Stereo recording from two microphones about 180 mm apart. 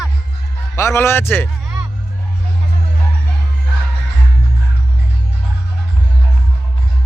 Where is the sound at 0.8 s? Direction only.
15° left (ahead or behind).